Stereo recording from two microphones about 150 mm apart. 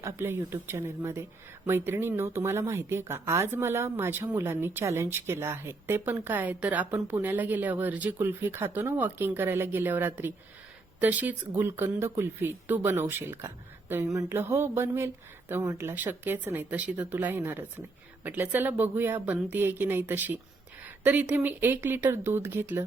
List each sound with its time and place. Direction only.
0.0 s a woman's voice: 15° right (ahead or behind)